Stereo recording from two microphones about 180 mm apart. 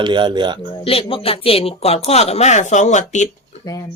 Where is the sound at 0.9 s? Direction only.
30° left (ahead or behind).